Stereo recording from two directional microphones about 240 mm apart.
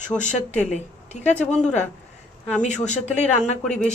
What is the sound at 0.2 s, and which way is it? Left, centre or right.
Speech, left.